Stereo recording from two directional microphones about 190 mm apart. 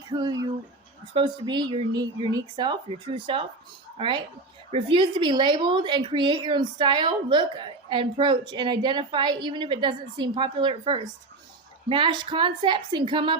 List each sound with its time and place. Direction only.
0.1 s a woman's voice: 20° right (ahead or behind)